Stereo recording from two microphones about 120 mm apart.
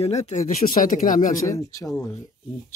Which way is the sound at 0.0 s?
65° left (ahead or behind).